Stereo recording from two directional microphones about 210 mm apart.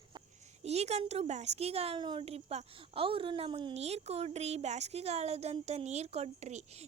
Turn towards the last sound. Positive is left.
turn(degrees=-30)  # may be behind; listen again after turning